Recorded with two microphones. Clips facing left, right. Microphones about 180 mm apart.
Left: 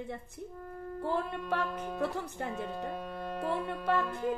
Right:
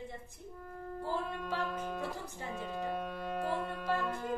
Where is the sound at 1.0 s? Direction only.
65° left (ahead or behind).